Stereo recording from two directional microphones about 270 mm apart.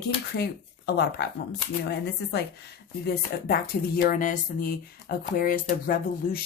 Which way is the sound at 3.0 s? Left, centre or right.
Left.